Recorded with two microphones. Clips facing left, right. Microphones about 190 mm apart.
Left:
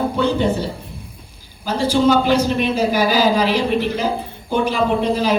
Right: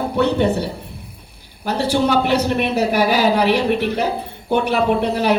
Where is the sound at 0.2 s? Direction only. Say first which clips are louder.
Right 3 dB; 70° right (ahead or behind).